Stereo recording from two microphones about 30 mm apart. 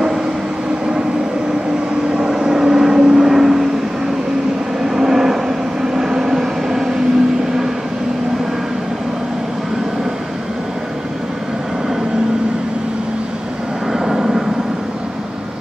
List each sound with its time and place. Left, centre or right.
2.1 s vehicle: right
4.8 s train: centre
13.9 s vehicle: centre